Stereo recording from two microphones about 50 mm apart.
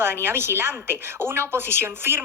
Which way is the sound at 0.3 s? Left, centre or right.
Right.